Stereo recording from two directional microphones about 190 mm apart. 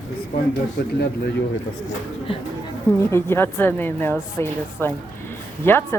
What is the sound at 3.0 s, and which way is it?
A woman's voice, 15° left (ahead or behind).